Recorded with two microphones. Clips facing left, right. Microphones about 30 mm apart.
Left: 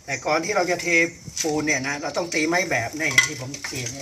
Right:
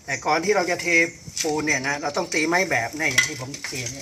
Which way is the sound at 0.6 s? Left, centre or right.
Right.